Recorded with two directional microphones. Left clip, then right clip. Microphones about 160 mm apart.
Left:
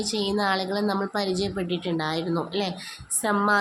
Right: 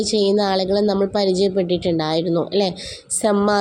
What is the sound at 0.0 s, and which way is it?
A woman's voice, 25° right (ahead or behind).